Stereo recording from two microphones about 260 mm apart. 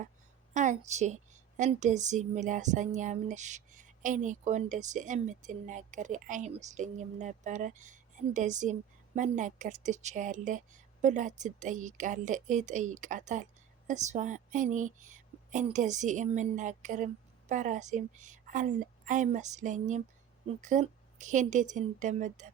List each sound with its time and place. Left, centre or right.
0.5 s a woman's voice: right